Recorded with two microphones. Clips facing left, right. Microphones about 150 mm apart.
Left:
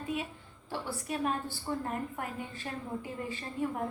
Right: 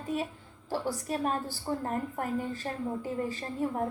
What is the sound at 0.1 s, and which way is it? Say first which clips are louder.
A woman's voice: right 4 dB; 40° right (ahead or behind).